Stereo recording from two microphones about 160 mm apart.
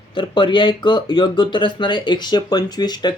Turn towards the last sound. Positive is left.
turn(degrees=25)  # may be behind; listen again after turning